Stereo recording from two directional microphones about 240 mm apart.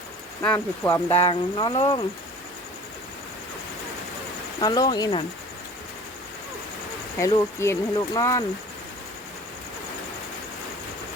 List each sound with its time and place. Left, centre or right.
0.4 s speech: centre
1.2 s speech: centre
4.6 s speech: centre
7.2 s speech: centre